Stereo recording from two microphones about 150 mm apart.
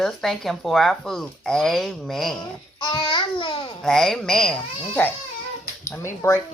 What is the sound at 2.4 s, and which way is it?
A child's voice, 30° left (ahead or behind).